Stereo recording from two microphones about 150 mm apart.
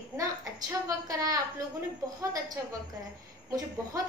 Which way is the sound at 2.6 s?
20° right (ahead or behind).